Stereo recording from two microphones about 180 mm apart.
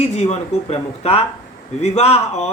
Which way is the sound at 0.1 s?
40° left (ahead or behind).